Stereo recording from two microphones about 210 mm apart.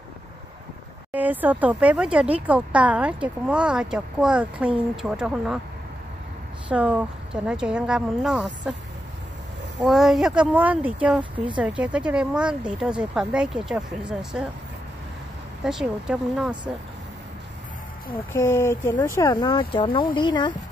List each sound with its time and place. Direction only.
1.1 s speech: 10° right (ahead or behind)
6.7 s speech: 5° right (ahead or behind)
9.8 s speech: centre (ahead or behind)
15.6 s speech: 5° right (ahead or behind)
18.3 s speech: 15° left (ahead or behind)